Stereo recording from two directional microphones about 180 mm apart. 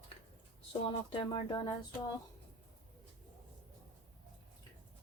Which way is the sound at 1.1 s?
30° left (ahead or behind).